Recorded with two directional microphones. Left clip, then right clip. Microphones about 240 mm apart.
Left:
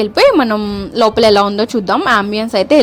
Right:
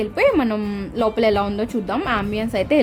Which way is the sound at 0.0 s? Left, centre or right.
Centre.